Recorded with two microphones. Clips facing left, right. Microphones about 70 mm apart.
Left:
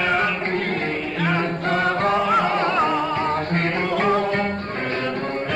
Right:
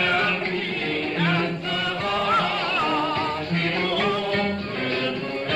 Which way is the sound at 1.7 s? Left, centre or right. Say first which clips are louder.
Left 9 dB; left.